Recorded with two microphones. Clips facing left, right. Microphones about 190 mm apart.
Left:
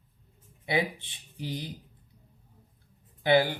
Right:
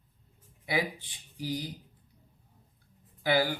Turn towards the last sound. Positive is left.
turn(degrees=25)  # may be behind; listen again after turning